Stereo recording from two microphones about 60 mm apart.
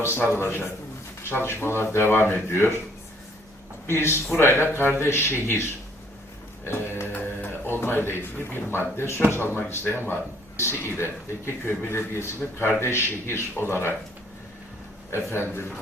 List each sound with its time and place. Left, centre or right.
0.0 s a man's voice: left
3.8 s a man's voice: left
6.7 s a man's voice: left
15.1 s a man's voice: left